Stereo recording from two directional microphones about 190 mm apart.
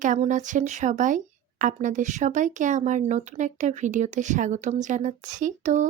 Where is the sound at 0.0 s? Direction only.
40° right (ahead or behind).